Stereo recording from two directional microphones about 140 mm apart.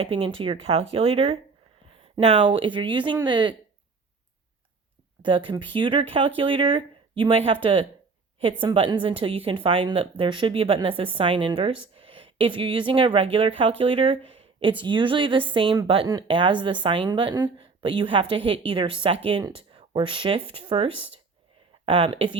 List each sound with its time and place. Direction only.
0.0 s a woman's voice: 40° right (ahead or behind)
5.2 s a woman's voice: 35° right (ahead or behind)